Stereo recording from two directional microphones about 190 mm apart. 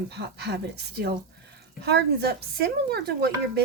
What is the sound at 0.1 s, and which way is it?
A woman's voice, 60° right (ahead or behind).